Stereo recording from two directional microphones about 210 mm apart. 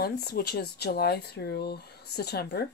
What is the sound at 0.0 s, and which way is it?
Speech, 50° left (ahead or behind).